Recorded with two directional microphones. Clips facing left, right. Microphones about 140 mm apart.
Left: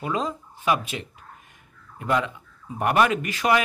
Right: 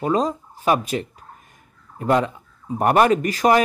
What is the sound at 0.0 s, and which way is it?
Speech, 40° right (ahead or behind).